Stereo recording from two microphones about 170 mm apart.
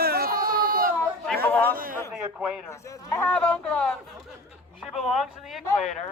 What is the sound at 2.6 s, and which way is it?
Speech, 15° left (ahead or behind).